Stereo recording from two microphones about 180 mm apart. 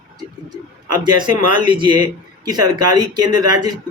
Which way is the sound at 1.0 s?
25° right (ahead or behind).